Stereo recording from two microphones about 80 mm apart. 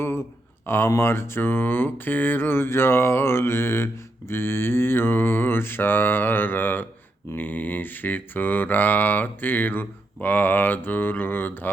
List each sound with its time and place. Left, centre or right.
0.0 s speech: left
4.3 s mantra: left